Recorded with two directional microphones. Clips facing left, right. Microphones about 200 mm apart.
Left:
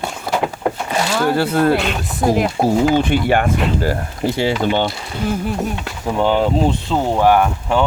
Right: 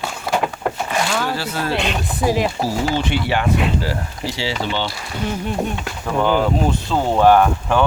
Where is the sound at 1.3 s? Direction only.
55° left (ahead or behind).